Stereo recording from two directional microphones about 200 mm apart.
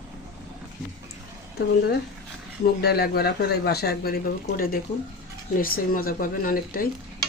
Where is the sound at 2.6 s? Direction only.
50° left (ahead or behind).